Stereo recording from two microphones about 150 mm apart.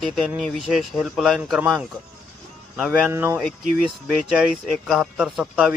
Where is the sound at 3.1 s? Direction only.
15° right (ahead or behind).